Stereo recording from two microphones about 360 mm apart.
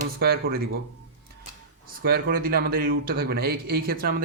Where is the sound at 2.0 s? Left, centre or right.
Right.